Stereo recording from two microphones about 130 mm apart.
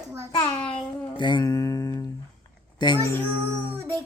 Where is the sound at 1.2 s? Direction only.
35° left (ahead or behind).